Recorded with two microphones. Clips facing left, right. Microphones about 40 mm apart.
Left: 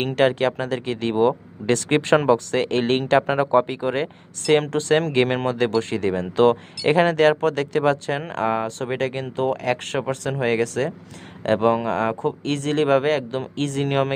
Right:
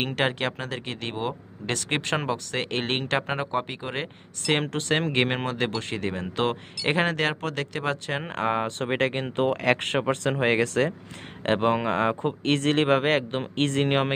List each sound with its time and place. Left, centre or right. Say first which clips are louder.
0.0 s speech: left 7 dB; centre
7.9 s speech: left 6 dB; centre